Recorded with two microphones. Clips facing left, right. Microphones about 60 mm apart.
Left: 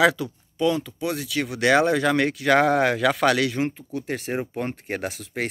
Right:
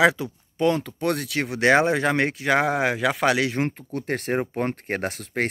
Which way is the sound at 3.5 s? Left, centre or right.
Right.